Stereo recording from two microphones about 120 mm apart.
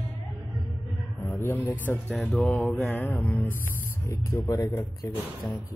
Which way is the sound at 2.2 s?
Centre (ahead or behind).